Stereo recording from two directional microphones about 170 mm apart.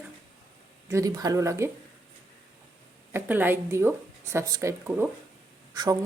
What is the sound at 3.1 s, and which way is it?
Speech, 10° right (ahead or behind).